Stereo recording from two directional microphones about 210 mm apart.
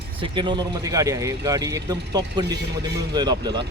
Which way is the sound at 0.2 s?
20° right (ahead or behind).